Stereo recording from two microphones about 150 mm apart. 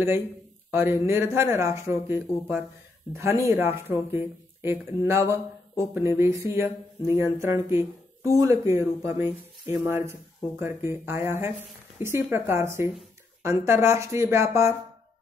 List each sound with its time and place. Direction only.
0.7 s speech: 15° right (ahead or behind)